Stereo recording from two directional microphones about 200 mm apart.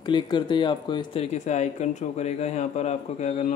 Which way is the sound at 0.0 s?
20° left (ahead or behind).